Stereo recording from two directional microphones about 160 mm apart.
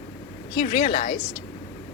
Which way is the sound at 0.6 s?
40° left (ahead or behind).